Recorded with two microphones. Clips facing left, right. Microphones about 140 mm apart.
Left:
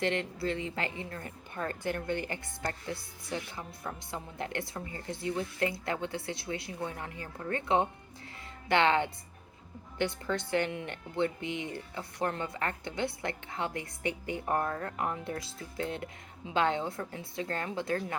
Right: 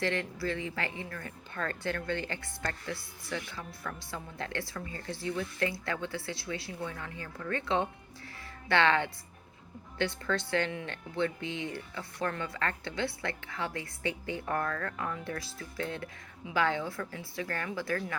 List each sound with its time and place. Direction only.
0.0 s a woman's voice: 20° left (ahead or behind)